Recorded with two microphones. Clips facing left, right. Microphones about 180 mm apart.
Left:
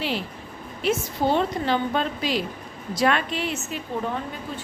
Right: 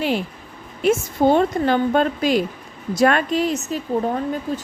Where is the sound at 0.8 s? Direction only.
50° right (ahead or behind).